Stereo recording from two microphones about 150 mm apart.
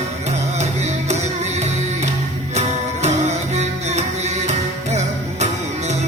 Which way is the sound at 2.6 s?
50° right (ahead or behind).